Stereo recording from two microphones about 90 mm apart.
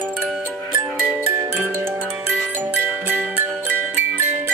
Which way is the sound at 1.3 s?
20° right (ahead or behind).